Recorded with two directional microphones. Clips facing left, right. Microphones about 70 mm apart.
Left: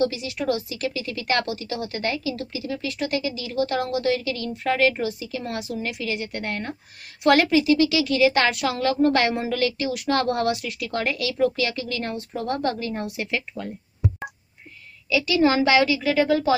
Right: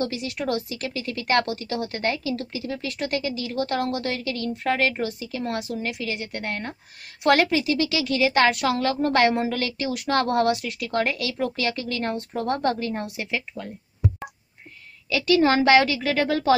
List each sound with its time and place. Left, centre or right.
0.1 s a woman's voice: right
15.0 s a woman's voice: right